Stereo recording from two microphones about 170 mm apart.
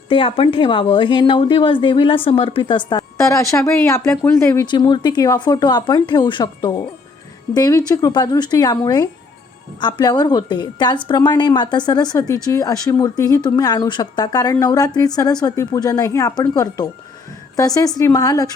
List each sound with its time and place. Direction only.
0.1 s a woman's voice: 30° left (ahead or behind)